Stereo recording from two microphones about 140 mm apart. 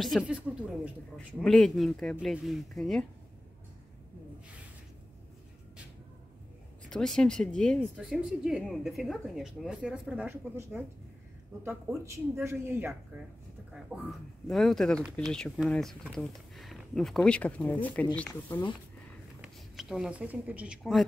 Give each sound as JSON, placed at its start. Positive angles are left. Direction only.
{"t": 0.2, "sound": "a woman's voice", "side_deg": -10}
{"t": 1.1, "sound": "a woman's voice", "side_deg": 5}
{"t": 6.9, "sound": "a woman's voice", "side_deg": 5}
{"t": 14.5, "sound": "a woman's voice", "side_deg": 0}
{"t": 19.4, "sound": "speech", "side_deg": -5}